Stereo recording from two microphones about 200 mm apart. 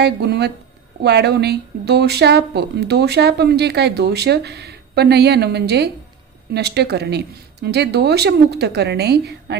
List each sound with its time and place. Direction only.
0.0 s speech: 55° right (ahead or behind)